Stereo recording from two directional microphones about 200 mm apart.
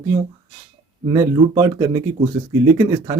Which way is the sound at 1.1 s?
20° right (ahead or behind).